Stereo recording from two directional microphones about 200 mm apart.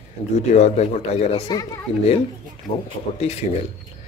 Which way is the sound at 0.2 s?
30° left (ahead or behind).